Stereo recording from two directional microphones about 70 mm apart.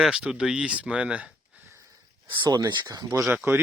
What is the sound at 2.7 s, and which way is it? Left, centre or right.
Speech, right.